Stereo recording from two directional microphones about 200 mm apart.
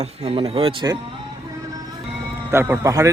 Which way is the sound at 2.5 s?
10° right (ahead or behind).